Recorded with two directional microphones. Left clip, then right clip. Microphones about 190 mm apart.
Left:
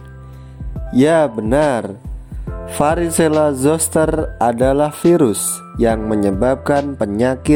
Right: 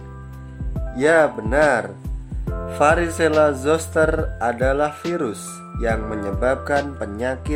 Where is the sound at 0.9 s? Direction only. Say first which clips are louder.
Left 3 dB; 40° left (ahead or behind).